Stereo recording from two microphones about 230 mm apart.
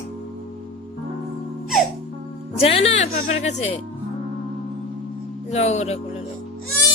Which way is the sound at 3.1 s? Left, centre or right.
Left.